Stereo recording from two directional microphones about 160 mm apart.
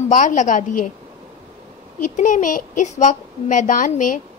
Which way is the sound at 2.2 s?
55° left (ahead or behind).